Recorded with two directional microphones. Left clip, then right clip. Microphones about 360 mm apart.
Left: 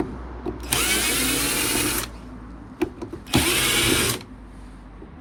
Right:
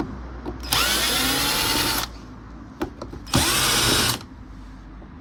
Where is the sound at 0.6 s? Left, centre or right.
Centre.